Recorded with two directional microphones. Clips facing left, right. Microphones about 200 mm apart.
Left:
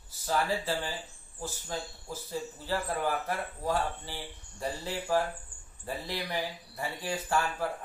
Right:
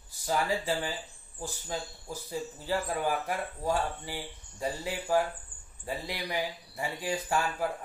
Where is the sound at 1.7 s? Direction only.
15° right (ahead or behind).